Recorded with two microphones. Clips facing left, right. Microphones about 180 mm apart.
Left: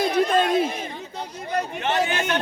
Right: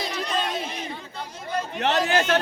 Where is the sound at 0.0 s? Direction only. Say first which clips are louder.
Left 8 dB; 50° left (ahead or behind).